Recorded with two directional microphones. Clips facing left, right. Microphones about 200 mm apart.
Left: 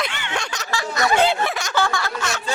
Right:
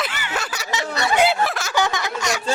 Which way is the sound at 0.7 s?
25° right (ahead or behind).